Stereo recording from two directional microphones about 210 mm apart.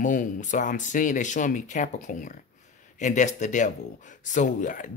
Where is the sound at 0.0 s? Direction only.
35° left (ahead or behind).